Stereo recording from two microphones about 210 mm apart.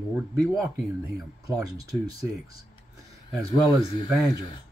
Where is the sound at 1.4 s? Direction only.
15° right (ahead or behind).